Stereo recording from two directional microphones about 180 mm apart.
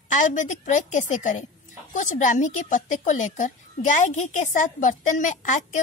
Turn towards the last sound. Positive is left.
turn(degrees=45)  # may be behind; listen again after turning